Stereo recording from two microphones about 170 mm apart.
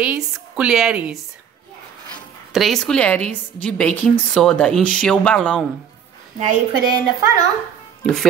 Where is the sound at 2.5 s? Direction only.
Centre (ahead or behind).